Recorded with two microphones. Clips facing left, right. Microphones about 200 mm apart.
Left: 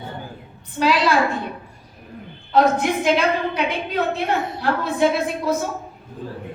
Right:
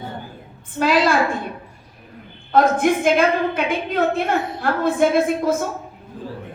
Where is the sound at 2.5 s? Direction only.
50° right (ahead or behind).